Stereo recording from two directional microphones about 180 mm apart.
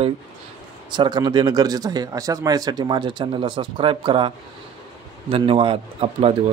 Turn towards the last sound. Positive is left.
turn(degrees=-30)  # may be behind; listen again after turning